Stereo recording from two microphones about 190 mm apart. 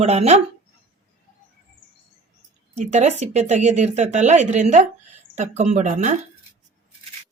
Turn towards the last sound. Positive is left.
turn(degrees=-40)  # may be behind; listen again after turning